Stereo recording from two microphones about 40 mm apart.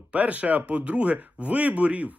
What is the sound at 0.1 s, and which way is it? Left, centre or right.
Speech, right.